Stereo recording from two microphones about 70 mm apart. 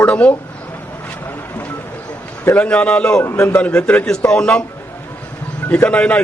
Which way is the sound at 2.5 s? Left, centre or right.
Centre.